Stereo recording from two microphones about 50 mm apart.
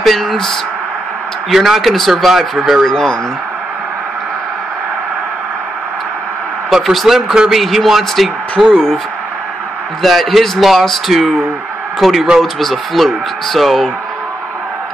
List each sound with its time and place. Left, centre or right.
0.0 s a sound: centre
1.5 s speech: centre
2.8 s speech: centre
6.7 s speech: centre
8.7 s speech: centre
10.0 s speech: centre